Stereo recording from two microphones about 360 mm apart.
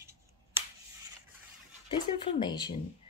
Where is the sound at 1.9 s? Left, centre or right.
Centre.